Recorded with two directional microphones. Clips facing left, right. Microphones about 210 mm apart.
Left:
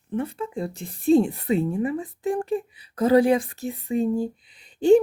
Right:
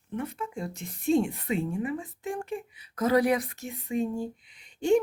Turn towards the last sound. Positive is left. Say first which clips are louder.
# left 7 dB
turn(degrees=35)  # may be behind; listen again after turning